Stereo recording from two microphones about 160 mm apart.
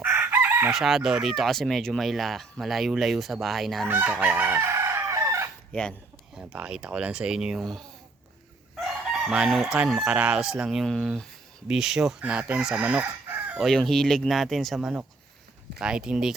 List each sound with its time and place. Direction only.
0.0 s chicken: 5° right (ahead or behind)
0.8 s speech: centre (ahead or behind)
3.8 s chicken: 15° right (ahead or behind)
5.7 s speech: 10° left (ahead or behind)
6.5 s speech: 5° right (ahead or behind)
8.7 s chicken: 5° right (ahead or behind)
13.6 s speech: centre (ahead or behind)